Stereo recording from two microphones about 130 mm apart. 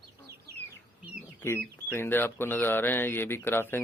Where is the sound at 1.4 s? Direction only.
20° left (ahead or behind).